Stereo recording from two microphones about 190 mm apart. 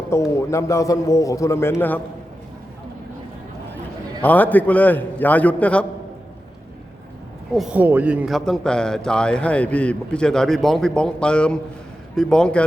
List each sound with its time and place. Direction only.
0.1 s a man's voice: 15° left (ahead or behind)
4.2 s a man's voice: 10° left (ahead or behind)
7.5 s a man's voice: 5° right (ahead or behind)